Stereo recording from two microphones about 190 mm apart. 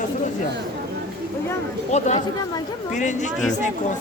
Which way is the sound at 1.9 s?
35° left (ahead or behind).